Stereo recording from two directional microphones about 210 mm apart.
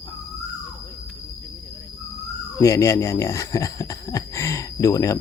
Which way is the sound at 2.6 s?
15° left (ahead or behind).